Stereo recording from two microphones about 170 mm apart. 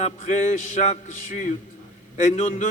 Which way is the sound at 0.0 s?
40° left (ahead or behind).